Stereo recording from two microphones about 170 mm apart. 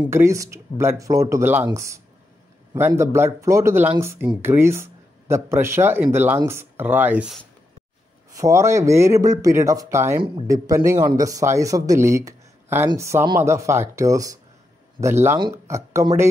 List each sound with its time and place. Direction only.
0.0 s speech: 15° right (ahead or behind)
8.4 s speech: 15° right (ahead or behind)
15.5 s speech: 15° right (ahead or behind)